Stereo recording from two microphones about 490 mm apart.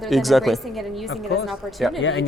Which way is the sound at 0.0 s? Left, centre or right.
Centre.